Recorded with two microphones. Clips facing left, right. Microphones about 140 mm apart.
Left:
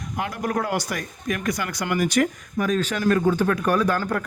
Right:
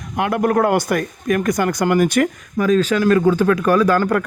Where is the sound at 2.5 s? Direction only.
90° right.